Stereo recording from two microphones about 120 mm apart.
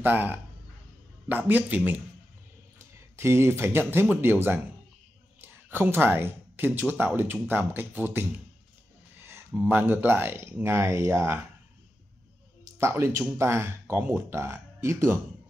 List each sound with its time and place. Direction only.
0.0 s speech: 15° right (ahead or behind)
2.8 s speech: 20° right (ahead or behind)
12.6 s speech: 25° right (ahead or behind)